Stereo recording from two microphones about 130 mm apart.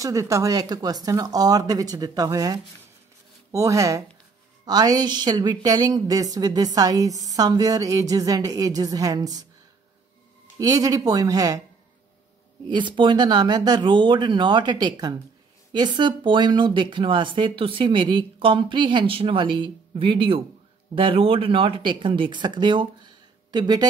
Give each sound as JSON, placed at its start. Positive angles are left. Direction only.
{"t": 0.0, "sound": "a woman's voice", "side_deg": -25}
{"t": 10.6, "sound": "a woman's voice", "side_deg": -30}
{"t": 12.6, "sound": "speech", "side_deg": -35}